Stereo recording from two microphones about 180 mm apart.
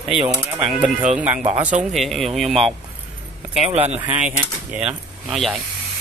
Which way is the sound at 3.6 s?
35° right (ahead or behind).